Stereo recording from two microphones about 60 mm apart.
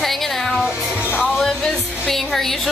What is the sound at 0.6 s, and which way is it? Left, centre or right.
Speech, centre.